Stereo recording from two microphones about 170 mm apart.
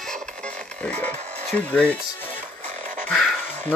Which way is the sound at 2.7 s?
50° right (ahead or behind).